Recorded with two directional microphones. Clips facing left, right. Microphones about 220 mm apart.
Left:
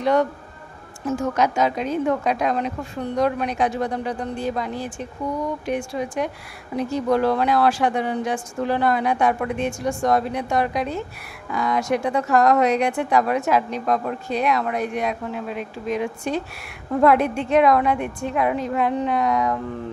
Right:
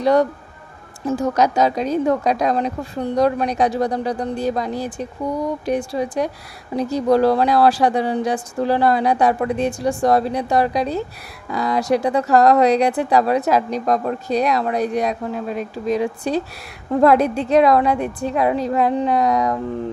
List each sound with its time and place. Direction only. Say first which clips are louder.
0.0 s speech: right 4 dB; 35° right (ahead or behind)